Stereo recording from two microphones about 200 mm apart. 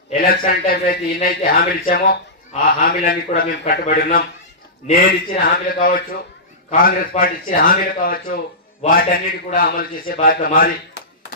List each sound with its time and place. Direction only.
0.1 s a man's voice: 45° left (ahead or behind)